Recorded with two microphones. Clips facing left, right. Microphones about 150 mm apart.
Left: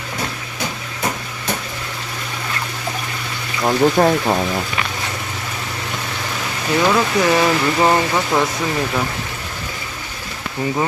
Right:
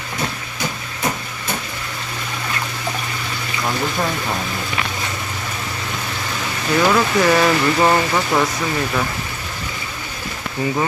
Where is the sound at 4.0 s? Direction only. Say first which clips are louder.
Left 9 dB; 40° left (ahead or behind).